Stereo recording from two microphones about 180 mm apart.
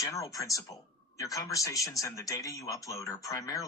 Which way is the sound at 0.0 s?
20° left (ahead or behind).